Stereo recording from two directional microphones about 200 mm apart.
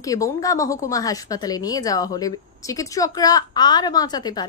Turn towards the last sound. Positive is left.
turn(degrees=20)  # may be behind; listen again after turning